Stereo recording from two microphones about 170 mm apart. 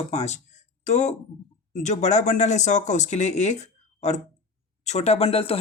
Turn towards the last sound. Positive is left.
turn(degrees=35)  # may be behind; listen again after turning